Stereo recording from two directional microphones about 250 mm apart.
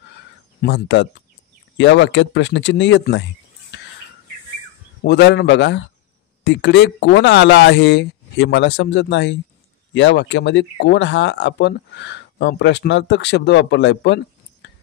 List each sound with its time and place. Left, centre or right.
0.6 s speech: left
5.0 s speech: left